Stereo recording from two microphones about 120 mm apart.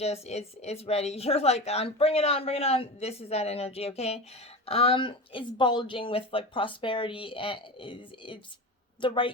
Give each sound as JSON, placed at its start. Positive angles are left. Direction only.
{"t": 0.0, "sound": "a woman's voice", "side_deg": 65}